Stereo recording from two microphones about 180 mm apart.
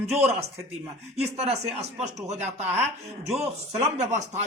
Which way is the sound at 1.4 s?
35° right (ahead or behind).